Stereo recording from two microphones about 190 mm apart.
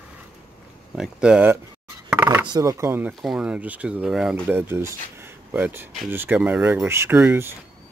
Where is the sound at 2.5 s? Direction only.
20° right (ahead or behind).